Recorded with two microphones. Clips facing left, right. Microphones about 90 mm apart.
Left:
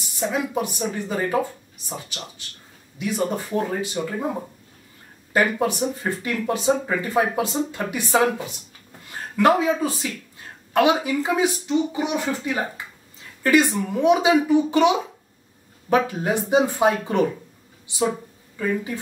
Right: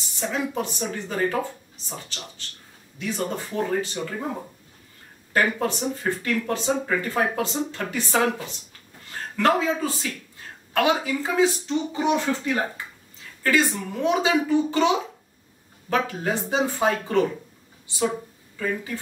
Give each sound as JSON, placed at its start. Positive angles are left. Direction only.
{"t": 0.2, "sound": "speech", "side_deg": 15}